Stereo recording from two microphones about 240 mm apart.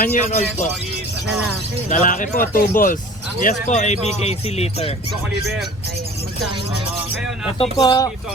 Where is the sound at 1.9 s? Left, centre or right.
Left.